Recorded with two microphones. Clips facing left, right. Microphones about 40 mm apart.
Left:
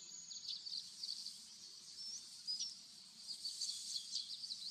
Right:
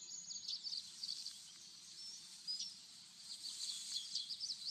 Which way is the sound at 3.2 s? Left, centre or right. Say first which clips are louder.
Left 1 dB; right.